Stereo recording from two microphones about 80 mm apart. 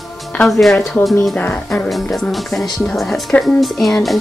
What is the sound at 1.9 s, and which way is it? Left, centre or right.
Speech, centre.